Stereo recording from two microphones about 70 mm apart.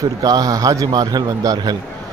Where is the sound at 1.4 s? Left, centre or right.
Right.